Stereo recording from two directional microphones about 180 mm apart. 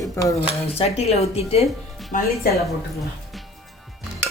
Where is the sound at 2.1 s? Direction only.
45° left (ahead or behind).